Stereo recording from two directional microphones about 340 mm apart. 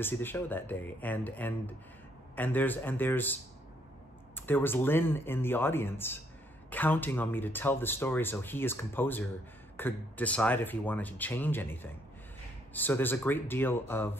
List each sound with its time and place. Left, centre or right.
0.0 s speech: centre
4.4 s speech: centre